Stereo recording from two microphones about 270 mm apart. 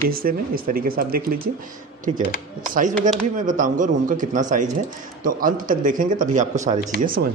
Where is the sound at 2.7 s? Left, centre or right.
Right.